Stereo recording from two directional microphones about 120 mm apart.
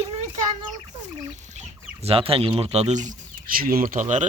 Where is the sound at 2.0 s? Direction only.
50° right (ahead or behind); by 4.2 s 90° right.